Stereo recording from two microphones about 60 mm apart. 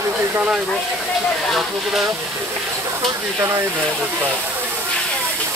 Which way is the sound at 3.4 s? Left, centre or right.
Right.